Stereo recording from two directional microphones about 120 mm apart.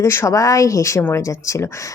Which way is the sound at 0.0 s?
20° left (ahead or behind).